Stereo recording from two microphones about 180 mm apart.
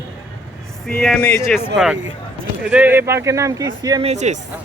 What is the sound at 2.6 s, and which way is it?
Speech, 10° right (ahead or behind).